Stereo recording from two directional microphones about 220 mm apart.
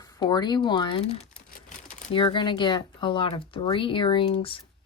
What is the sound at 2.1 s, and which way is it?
Speech, 20° left (ahead or behind).